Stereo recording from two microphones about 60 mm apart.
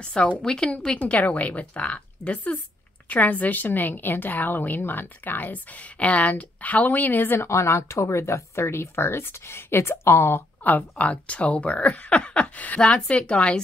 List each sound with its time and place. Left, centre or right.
0.0 s speech: centre
0.7 s a woman's voice: left
7.4 s speech: left
10.6 s speech: left